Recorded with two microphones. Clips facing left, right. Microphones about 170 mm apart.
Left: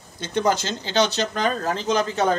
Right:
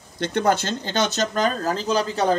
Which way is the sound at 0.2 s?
60° right (ahead or behind).